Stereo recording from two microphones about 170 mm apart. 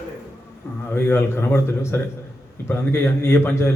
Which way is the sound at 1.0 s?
15° left (ahead or behind).